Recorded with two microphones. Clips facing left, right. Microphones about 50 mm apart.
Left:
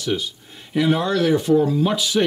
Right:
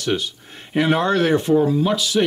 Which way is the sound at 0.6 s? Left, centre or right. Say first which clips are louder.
Right 1 dB; right.